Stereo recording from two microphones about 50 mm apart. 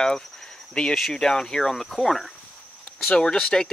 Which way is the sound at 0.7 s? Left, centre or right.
Centre.